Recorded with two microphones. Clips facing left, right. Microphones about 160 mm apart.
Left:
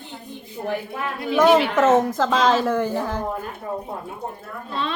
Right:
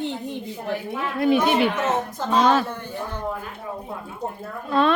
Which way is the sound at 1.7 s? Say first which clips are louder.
Left 7 dB; 90° left.